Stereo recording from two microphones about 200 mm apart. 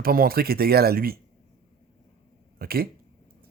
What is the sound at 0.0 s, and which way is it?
Speech, 50° right (ahead or behind).